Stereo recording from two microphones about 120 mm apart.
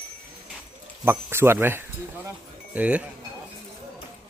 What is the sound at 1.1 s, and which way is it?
A man's voice, 20° right (ahead or behind).